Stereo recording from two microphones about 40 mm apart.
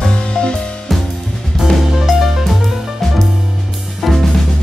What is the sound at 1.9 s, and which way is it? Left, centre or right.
Music, centre.